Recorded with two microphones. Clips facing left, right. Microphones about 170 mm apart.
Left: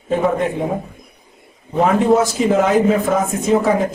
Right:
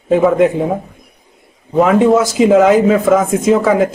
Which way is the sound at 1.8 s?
90° right.